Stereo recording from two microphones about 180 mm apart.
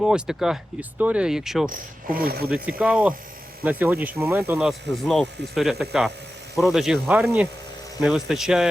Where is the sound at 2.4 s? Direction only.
5° right (ahead or behind).